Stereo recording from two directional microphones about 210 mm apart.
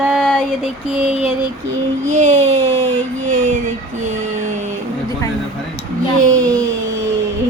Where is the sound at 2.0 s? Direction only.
35° right (ahead or behind).